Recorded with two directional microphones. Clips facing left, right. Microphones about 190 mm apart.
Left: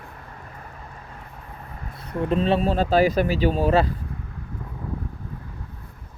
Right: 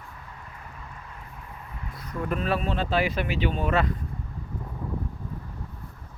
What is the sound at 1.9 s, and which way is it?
Speech, 30° left (ahead or behind).